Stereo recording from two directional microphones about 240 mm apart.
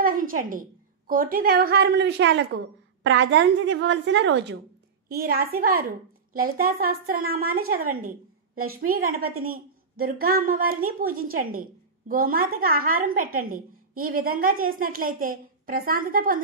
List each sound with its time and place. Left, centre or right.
0.0 s a woman's voice: right